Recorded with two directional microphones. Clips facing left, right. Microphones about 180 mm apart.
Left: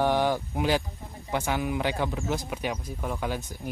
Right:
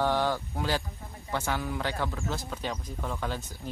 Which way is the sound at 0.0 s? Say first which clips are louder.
Left 3 dB; 15° left (ahead or behind).